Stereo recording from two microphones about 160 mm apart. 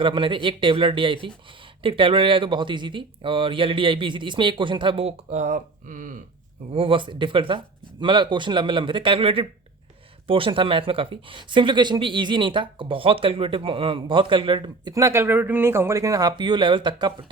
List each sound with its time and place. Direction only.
0.0 s speech: 30° right (ahead or behind); by 6.2 s 55° right (ahead or behind)
6.7 s speech: 35° right (ahead or behind)